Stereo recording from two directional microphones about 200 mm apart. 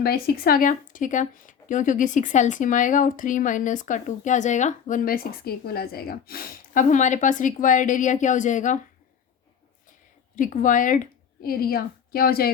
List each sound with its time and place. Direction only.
0.0 s speech: 50° left (ahead or behind)
10.3 s a woman's voice: 40° left (ahead or behind)